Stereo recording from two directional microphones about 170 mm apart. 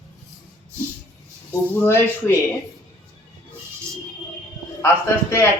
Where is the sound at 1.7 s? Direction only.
10° left (ahead or behind).